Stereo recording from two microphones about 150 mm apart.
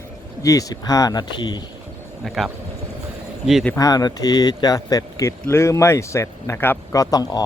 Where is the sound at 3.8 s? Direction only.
25° left (ahead or behind).